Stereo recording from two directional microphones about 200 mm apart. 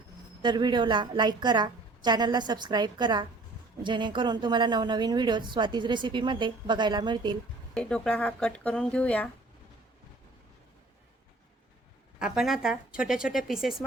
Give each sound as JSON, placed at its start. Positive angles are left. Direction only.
{"t": 0.4, "sound": "a woman's voice", "side_deg": -20}
{"t": 7.7, "sound": "speech", "side_deg": 5}
{"t": 12.2, "sound": "speech", "side_deg": 0}